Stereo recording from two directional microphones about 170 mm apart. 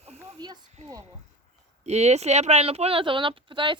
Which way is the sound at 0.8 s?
40° right (ahead or behind).